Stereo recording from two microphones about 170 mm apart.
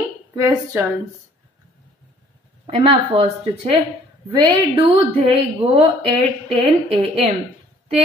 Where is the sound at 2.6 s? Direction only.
30° right (ahead or behind).